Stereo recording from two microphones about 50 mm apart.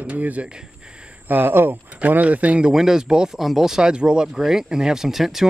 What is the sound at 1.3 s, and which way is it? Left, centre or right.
Speech, right.